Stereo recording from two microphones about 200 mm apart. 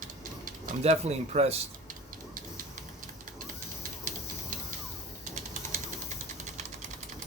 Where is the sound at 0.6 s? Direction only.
35° right (ahead or behind).